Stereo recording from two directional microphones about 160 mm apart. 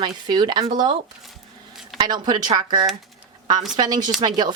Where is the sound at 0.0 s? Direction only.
30° right (ahead or behind).